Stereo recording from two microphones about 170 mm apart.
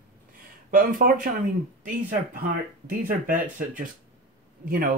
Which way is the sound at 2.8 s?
55° right (ahead or behind).